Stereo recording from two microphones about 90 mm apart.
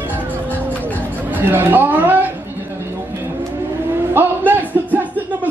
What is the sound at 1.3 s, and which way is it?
Speech, 20° right (ahead or behind).